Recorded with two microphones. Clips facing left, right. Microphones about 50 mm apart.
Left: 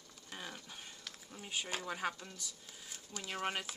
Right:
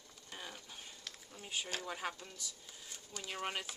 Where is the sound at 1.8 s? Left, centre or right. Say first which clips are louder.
Left 3 dB; centre.